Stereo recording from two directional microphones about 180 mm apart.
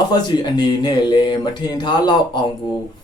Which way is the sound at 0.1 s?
25° left (ahead or behind).